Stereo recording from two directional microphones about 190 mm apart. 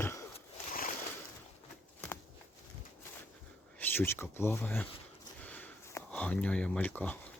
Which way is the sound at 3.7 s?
10° left (ahead or behind).